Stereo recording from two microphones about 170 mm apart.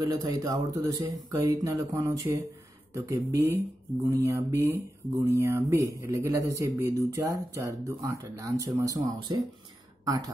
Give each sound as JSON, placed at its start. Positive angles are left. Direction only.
{"t": 0.0, "sound": "speech", "side_deg": -25}